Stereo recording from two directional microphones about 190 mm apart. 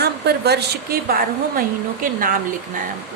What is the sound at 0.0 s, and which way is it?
A woman's voice, 60° right (ahead or behind).